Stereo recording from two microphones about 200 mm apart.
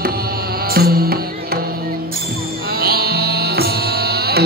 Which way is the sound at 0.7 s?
50° right (ahead or behind).